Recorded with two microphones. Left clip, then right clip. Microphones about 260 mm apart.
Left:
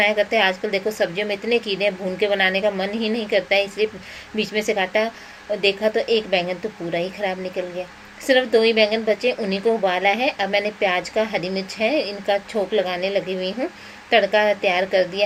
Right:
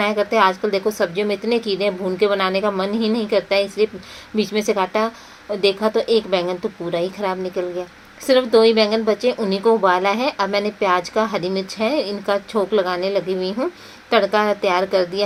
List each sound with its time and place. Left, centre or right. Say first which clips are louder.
0.0 s a woman's voice: right 1 dB; right